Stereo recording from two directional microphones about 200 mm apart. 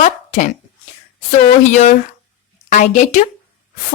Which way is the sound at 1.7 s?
35° left (ahead or behind).